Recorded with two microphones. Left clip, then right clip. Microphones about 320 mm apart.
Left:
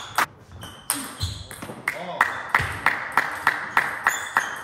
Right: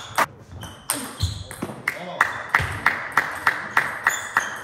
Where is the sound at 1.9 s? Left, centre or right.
Left.